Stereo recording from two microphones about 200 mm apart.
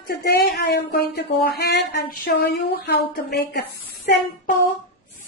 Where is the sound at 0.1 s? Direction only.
50° left (ahead or behind).